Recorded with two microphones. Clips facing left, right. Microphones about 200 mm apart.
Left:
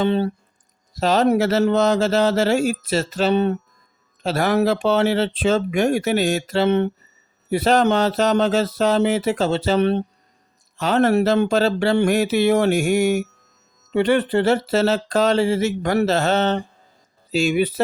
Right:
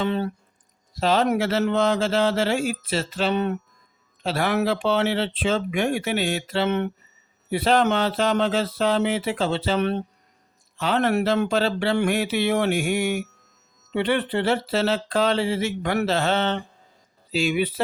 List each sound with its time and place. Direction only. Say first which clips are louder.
0.0 s speech: left 5 dB; 30° left (ahead or behind)
0.9 s speech: left 4 dB; 40° left (ahead or behind)
4.2 s speech: left 4 dB; 40° left (ahead or behind)
7.5 s speech: left 3 dB; 40° left (ahead or behind)